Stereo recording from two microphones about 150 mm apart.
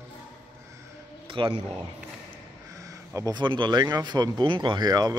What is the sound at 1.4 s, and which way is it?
Speech, 35° right (ahead or behind).